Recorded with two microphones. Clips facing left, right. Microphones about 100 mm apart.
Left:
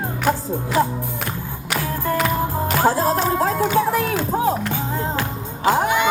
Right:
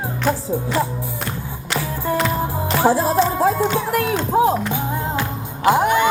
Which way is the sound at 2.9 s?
10° right (ahead or behind).